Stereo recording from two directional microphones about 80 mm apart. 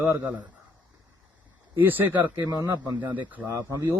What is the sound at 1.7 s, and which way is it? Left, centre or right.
Speech, right.